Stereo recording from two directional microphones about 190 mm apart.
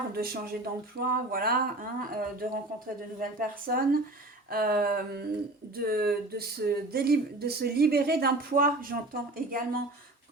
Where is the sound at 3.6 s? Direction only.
50° right (ahead or behind).